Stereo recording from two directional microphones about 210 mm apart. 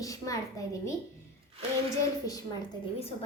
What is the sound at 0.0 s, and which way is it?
Speech, 15° left (ahead or behind).